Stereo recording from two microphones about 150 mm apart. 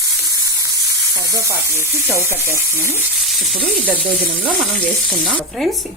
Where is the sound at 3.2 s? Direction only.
Centre (ahead or behind).